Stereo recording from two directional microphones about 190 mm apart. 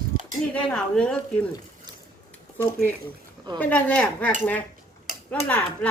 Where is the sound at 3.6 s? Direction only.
10° left (ahead or behind).